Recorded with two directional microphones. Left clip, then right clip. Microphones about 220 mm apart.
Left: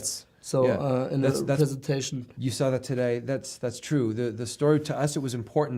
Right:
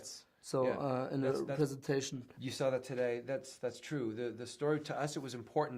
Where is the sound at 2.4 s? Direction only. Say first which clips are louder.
Left 8 dB; 45° left (ahead or behind).